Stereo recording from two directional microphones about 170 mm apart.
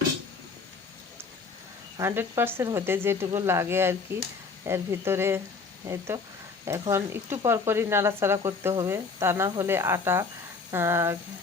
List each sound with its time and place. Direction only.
2.0 s speech: 15° right (ahead or behind)